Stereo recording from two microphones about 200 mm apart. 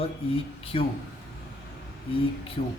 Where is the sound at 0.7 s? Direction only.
30° left (ahead or behind).